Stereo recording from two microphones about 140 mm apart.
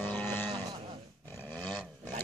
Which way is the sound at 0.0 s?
15° left (ahead or behind).